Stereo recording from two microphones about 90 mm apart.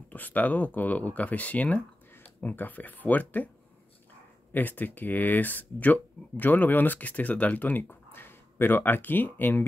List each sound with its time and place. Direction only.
0.1 s speech: 20° left (ahead or behind)
4.5 s speech: 20° left (ahead or behind)